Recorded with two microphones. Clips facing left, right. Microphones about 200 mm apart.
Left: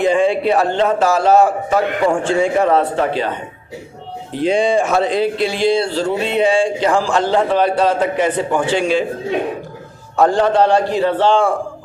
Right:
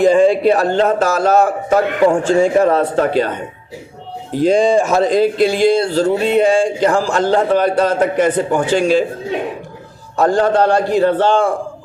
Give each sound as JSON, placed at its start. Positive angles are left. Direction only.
{"t": 0.0, "sound": "speech", "side_deg": -40}
{"t": 4.4, "sound": "speech", "side_deg": -40}
{"t": 10.2, "sound": "speech", "side_deg": -45}